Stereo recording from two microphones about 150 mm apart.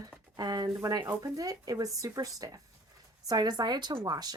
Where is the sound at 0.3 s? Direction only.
25° right (ahead or behind).